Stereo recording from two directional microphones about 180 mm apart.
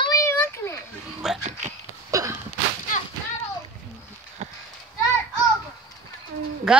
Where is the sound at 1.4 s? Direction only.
40° right (ahead or behind).